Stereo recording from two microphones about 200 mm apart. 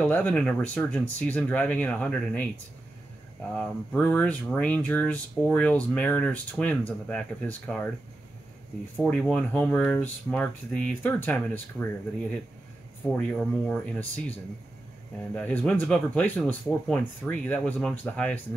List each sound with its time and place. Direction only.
0.0 s speech: 5° left (ahead or behind)
3.5 s speech: 10° left (ahead or behind)
8.9 s speech: 5° left (ahead or behind)
13.0 s speech: 5° left (ahead or behind)
15.3 s speech: 5° left (ahead or behind)